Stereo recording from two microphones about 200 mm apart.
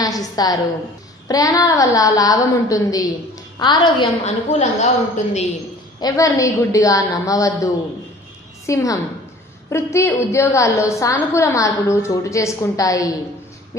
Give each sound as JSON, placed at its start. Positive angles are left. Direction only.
{"t": 0.0, "sound": "a woman's voice", "side_deg": 20}
{"t": 5.9, "sound": "a woman's voice", "side_deg": 15}
{"t": 8.6, "sound": "a woman's voice", "side_deg": 15}